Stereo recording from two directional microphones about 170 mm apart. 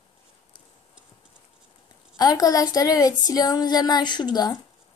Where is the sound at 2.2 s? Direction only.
20° left (ahead or behind).